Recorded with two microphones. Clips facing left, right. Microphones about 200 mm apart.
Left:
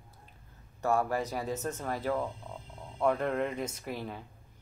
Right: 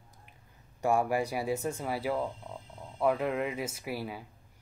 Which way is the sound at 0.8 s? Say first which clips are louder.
Right 2 dB; 15° right (ahead or behind).